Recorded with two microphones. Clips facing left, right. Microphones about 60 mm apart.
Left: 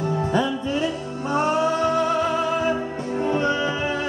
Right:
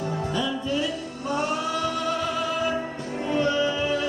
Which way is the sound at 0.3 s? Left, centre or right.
Left.